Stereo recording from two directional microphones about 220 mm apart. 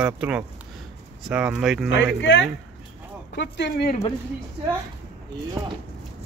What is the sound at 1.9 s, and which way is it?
Speech, 55° left (ahead or behind).